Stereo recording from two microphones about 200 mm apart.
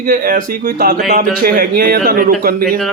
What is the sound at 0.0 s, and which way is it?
Speech, 45° right (ahead or behind).